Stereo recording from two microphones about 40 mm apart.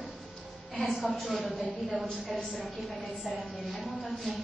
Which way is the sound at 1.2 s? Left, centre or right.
Centre.